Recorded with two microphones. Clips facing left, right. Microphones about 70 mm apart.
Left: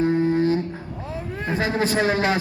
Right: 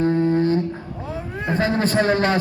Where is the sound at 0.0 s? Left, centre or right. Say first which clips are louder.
Right 1 dB; centre.